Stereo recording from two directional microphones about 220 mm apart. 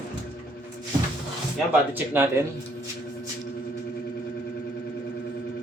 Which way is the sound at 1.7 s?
10° right (ahead or behind).